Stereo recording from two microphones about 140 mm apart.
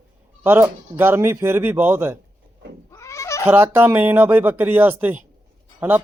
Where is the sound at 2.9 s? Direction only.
20° left (ahead or behind).